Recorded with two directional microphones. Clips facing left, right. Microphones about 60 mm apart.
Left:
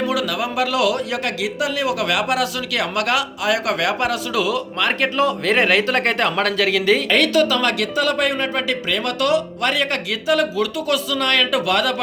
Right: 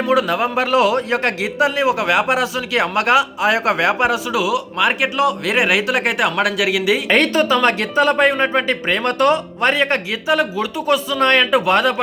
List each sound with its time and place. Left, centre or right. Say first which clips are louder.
0.1 s a man's voice: right 5 dB; right; by 7.0 s centre
7.1 s a man's voice: right 2 dB; right